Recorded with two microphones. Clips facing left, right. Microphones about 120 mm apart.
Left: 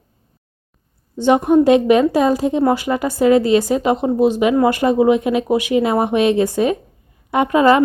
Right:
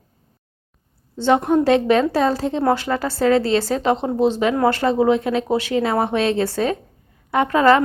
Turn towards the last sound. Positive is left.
turn(degrees=15)  # may be behind; listen again after turning